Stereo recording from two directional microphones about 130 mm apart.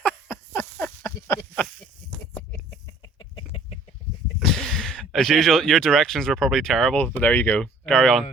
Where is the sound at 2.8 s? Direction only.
40° left (ahead or behind).